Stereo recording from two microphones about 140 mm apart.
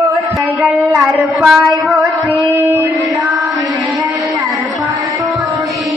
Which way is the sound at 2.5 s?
20° right (ahead or behind).